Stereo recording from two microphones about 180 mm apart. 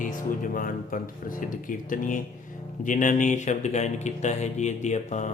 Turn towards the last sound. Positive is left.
turn(degrees=40)  # may be behind; listen again after turning